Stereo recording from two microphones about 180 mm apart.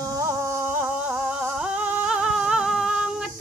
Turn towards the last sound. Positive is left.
turn(degrees=-5)  # may be behind; listen again after turning